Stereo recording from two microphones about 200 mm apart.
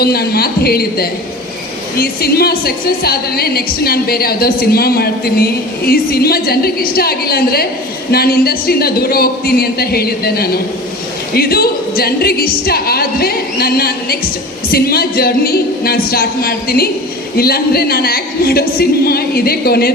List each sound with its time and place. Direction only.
0.0 s a woman's voice: 50° left (ahead or behind)